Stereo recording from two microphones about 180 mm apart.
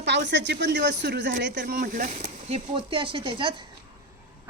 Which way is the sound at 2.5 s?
30° right (ahead or behind).